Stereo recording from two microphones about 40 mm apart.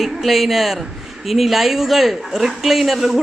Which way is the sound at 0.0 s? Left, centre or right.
Centre.